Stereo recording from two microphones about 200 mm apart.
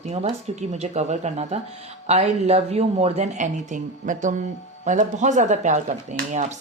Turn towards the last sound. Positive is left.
turn(degrees=-40)  # may be behind; listen again after turning